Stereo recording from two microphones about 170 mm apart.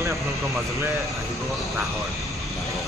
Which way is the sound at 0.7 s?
20° right (ahead or behind).